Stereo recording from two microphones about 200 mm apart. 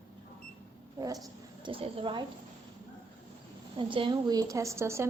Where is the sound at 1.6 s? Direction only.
25° right (ahead or behind).